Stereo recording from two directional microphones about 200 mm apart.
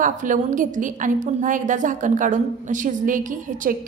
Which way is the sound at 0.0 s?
40° right (ahead or behind).